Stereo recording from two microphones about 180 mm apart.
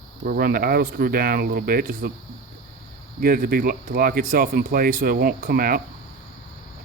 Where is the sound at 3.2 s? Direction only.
55° right (ahead or behind).